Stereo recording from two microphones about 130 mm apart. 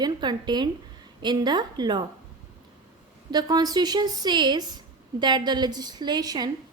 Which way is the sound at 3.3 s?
30° right (ahead or behind).